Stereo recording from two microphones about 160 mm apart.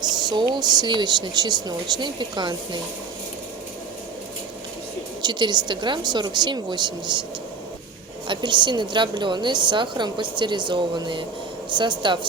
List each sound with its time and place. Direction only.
0.0 s a woman's voice: 25° right (ahead or behind)
5.2 s a woman's voice: 25° right (ahead or behind)
8.3 s a woman's voice: 30° right (ahead or behind)